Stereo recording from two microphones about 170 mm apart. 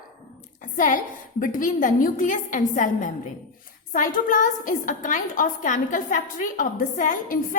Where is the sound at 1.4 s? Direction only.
55° left (ahead or behind).